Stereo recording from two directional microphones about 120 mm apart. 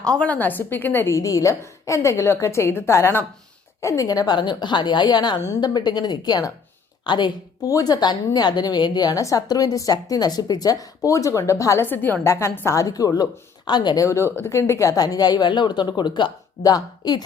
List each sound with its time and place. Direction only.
0.0 s a woman's voice: 10° left (ahead or behind); by 17.2 s 35° left (ahead or behind)